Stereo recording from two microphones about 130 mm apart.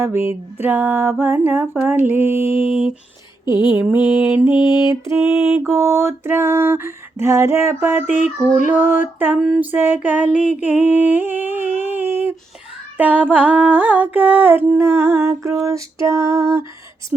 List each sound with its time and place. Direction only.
0.0 s mantra: 15° right (ahead or behind)
2.6 s a sound: 45° left (ahead or behind)
3.4 s mantra: 35° left (ahead or behind)
5.6 s a sound: 20° right (ahead or behind)
8.6 s mantra: 15° right (ahead or behind)
9.4 s a sound: 5° right (ahead or behind)
9.7 s mantra: 15° right (ahead or behind)
10.6 s humming: 15° right (ahead or behind)
13.0 s mantra: 10° right (ahead or behind)